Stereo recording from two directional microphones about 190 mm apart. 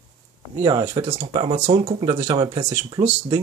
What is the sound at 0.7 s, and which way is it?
Speech, 20° right (ahead or behind).